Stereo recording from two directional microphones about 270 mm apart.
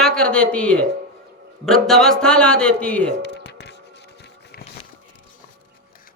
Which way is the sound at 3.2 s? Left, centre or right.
Left.